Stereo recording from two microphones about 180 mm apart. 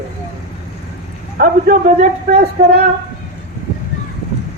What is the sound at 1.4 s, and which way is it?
A man's voice, 50° right (ahead or behind).